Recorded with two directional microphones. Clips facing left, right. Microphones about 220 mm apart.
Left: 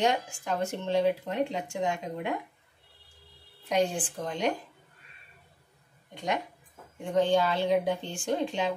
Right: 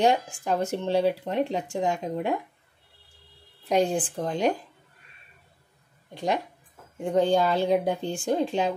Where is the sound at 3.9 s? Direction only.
35° right (ahead or behind).